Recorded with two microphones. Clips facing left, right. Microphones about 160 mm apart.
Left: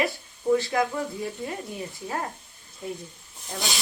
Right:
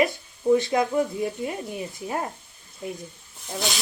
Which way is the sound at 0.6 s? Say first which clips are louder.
Right 3 dB; 20° right (ahead or behind).